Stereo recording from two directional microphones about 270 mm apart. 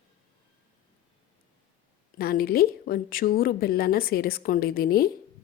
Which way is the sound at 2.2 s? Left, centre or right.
Left.